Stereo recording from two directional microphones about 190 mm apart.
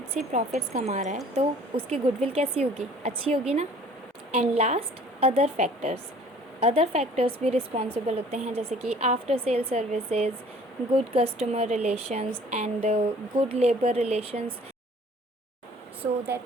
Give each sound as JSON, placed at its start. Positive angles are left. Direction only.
{"t": 0.1, "sound": "speech", "side_deg": -40}